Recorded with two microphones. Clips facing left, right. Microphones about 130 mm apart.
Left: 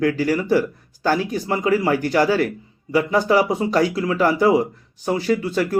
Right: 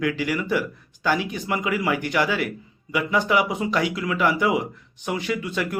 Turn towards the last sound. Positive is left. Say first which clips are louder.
# left 7 dB
turn(degrees=35)  # may be behind; listen again after turning